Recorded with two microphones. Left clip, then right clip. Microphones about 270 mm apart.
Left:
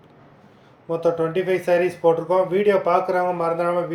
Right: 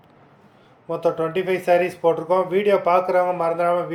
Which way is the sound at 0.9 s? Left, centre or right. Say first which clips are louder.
Left 1 dB; centre.